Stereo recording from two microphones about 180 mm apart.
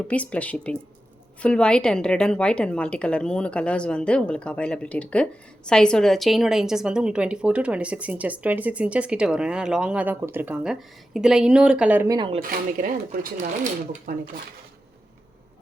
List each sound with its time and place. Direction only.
0.1 s a woman's voice: 5° left (ahead or behind)
12.0 s speech: 25° right (ahead or behind)
12.4 s speech: 50° right (ahead or behind)
14.1 s speech: 50° right (ahead or behind)